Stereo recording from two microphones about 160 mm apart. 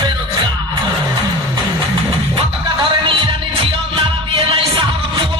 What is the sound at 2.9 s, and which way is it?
Music, 30° right (ahead or behind).